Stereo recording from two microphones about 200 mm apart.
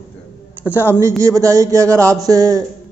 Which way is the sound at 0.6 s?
10° right (ahead or behind).